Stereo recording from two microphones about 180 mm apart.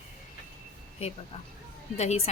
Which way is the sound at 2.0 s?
40° left (ahead or behind).